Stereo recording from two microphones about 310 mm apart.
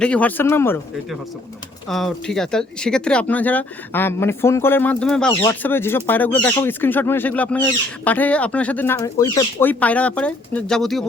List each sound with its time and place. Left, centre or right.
0.0 s speech: centre
1.9 s speech: centre